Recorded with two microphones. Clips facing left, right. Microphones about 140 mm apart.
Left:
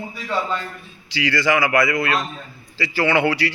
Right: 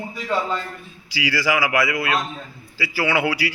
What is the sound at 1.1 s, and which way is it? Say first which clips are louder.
A man's voice: left 2 dB; 10° right (ahead or behind).